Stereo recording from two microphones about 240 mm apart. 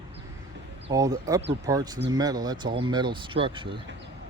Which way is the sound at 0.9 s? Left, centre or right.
Centre.